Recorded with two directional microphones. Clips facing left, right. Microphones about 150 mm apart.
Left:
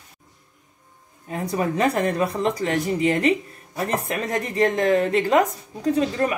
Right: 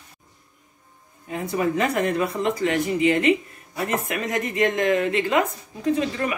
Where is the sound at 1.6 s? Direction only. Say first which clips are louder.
Left 1 dB; 35° left (ahead or behind).